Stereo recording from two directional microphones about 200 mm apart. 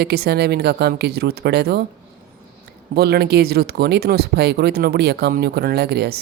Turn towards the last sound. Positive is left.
turn(degrees=-55)  # may be behind; listen again after turning